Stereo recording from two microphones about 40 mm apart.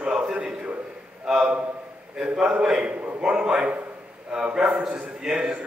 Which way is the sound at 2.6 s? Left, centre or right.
Right.